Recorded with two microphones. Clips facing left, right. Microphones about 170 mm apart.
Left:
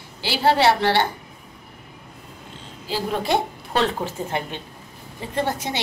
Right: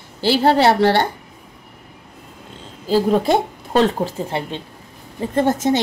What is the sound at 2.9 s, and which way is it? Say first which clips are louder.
Speech: right 7 dB; 40° right (ahead or behind).